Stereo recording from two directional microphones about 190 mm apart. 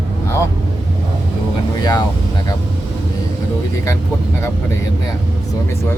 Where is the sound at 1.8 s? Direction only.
20° left (ahead or behind).